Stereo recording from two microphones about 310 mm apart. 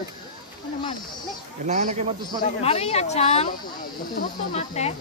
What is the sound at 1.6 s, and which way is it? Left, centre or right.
Speech, right.